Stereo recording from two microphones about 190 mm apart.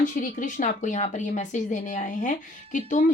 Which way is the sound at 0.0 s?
45° left (ahead or behind).